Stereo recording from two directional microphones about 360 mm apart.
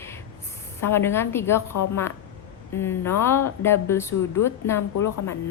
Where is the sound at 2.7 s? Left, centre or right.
Centre.